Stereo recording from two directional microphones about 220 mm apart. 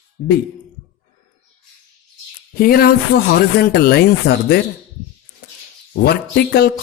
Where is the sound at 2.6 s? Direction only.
45° left (ahead or behind).